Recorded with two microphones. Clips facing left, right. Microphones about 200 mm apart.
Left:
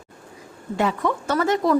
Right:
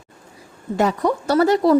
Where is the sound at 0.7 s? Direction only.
40° right (ahead or behind).